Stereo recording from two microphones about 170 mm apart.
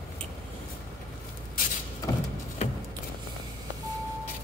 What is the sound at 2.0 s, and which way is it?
Vehicle, 20° left (ahead or behind).